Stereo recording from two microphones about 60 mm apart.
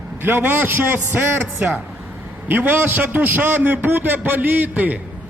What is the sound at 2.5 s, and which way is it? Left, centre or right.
A man's voice, right.